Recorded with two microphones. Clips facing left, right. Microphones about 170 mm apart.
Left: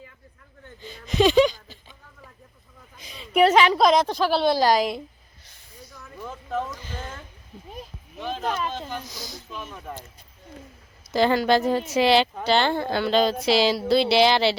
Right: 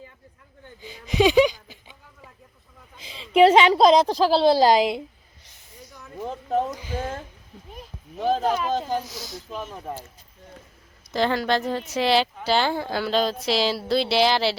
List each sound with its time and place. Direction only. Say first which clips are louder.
0.8 s a sound: even; 10° right (ahead or behind)
3.3 s a woman's voice: right 3 dB; 25° right (ahead or behind)
6.1 s speech: right 5 dB; 35° right (ahead or behind)
6.7 s speech: right 7 dB; 10° right (ahead or behind)
8.2 s speech: right 6 dB; 40° right (ahead or behind)
9.0 s speech: right 2 dB; 5° right (ahead or behind)
9.5 s speech: right 5 dB; 35° right (ahead or behind)
11.1 s speech: left 3 dB; centre (ahead or behind)